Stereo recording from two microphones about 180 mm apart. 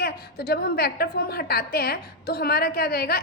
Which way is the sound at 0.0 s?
60° left (ahead or behind).